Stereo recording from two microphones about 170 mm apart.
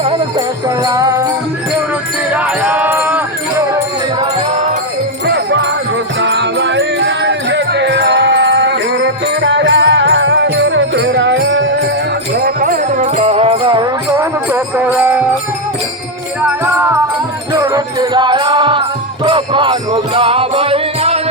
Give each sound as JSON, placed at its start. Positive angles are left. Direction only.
{"t": 0.8, "sound": "jingle bell", "side_deg": -20}
{"t": 2.3, "sound": "music", "side_deg": -10}
{"t": 5.2, "sound": "music", "side_deg": -90}
{"t": 12.4, "sound": "music", "side_deg": -60}
{"t": 13.1, "sound": "music", "side_deg": -35}
{"t": 14.2, "sound": "music", "side_deg": -10}
{"t": 16.5, "sound": "music", "side_deg": -10}